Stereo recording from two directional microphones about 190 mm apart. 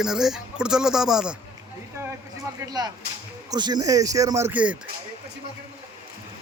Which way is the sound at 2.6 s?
20° right (ahead or behind).